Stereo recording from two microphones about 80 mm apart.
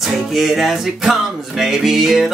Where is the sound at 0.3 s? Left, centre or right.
Centre.